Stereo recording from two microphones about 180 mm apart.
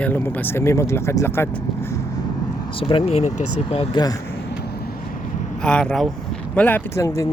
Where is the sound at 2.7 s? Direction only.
30° left (ahead or behind).